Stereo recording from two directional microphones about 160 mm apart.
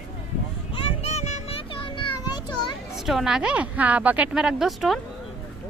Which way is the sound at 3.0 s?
Centre (ahead or behind).